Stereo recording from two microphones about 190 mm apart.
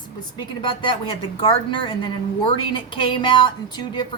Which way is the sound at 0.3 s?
25° left (ahead or behind).